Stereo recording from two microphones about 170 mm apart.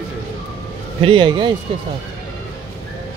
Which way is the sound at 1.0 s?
30° right (ahead or behind).